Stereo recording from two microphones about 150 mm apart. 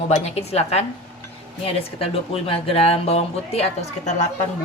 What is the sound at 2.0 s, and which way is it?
Speech, 40° left (ahead or behind).